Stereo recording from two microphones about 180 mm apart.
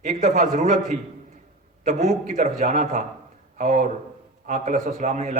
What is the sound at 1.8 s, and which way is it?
A man's voice, 40° right (ahead or behind).